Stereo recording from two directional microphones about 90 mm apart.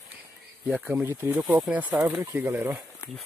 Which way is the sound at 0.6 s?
20° right (ahead or behind).